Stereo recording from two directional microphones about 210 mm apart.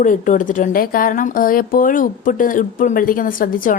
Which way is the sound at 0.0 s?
40° left (ahead or behind).